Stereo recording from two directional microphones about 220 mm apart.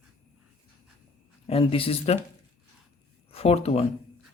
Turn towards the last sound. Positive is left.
turn(degrees=30)  # may be behind; listen again after turning